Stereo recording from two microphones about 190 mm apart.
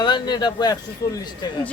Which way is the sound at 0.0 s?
20° left (ahead or behind).